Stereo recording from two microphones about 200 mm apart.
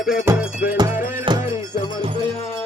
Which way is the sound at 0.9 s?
40° left (ahead or behind).